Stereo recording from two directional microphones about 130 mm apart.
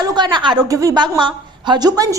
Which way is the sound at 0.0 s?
35° right (ahead or behind).